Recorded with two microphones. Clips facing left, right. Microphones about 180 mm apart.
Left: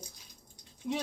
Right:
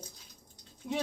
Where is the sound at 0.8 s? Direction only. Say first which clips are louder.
Left 1 dB; centre (ahead or behind).